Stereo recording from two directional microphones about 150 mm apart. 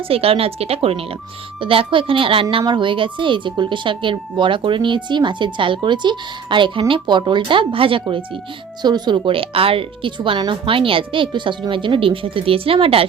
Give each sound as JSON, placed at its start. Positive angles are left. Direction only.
{"t": 0.1, "sound": "a woman's voice", "side_deg": -40}